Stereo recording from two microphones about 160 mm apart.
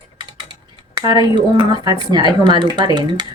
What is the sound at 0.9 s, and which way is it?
Speech, 25° right (ahead or behind).